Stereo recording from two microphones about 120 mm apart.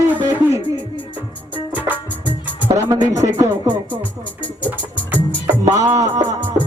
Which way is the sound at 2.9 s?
35° right (ahead or behind).